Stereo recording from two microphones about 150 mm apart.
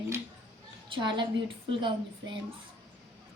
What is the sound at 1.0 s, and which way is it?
A woman's voice, 30° right (ahead or behind).